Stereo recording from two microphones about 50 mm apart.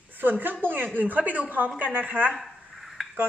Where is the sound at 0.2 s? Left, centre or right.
Right.